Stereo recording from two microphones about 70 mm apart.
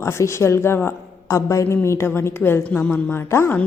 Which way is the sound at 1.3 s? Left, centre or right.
Left.